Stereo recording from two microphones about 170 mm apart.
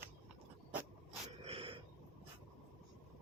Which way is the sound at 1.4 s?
35° right (ahead or behind).